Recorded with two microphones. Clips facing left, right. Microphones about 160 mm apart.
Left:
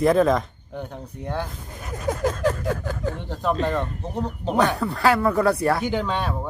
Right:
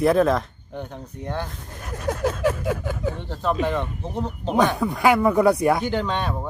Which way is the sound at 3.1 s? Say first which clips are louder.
Even; 10° left (ahead or behind).